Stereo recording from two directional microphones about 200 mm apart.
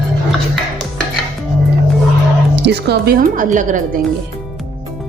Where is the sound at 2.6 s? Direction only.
55° right (ahead or behind); by 4.0 s 40° right (ahead or behind).